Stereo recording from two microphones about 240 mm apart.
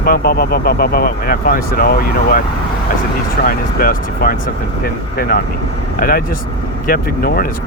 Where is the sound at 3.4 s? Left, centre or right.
Left.